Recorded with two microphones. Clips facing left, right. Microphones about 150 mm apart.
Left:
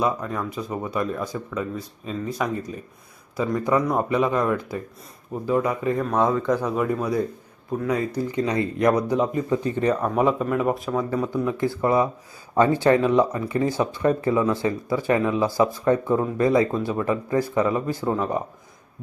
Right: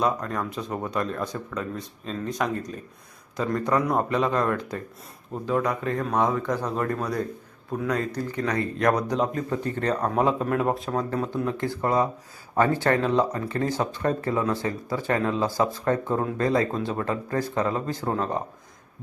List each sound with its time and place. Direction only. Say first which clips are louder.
0.0 s speech: left 1 dB; 5° left (ahead or behind)
8.9 s speech: left 2 dB; 5° left (ahead or behind)
9.5 s speech: left 5 dB; 15° left (ahead or behind)
10.2 s speech: left 2 dB; 5° left (ahead or behind)